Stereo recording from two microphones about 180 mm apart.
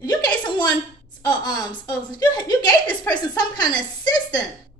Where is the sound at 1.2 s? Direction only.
20° left (ahead or behind).